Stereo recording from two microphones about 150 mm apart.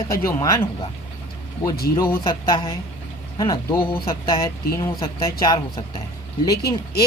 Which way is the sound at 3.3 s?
30° left (ahead or behind).